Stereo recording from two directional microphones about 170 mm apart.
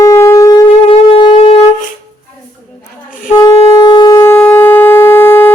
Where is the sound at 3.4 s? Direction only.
20° left (ahead or behind).